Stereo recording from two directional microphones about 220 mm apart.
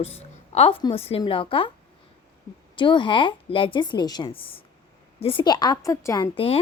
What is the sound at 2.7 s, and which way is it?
A woman's voice, 20° left (ahead or behind).